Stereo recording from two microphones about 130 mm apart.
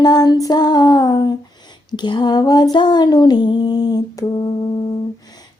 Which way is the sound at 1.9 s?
35° left (ahead or behind).